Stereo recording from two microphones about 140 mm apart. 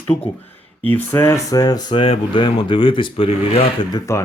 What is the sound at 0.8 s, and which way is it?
Speech, 15° left (ahead or behind).